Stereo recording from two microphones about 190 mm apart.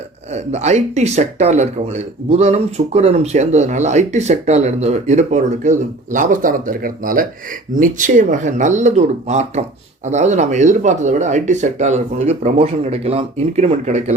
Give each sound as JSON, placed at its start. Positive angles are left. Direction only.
{"t": 0.3, "sound": "speech", "side_deg": -35}